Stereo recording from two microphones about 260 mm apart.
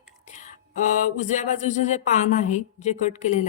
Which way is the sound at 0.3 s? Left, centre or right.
Left.